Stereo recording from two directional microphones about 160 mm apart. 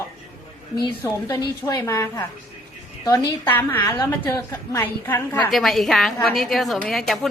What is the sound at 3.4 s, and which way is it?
A woman's voice, 10° left (ahead or behind).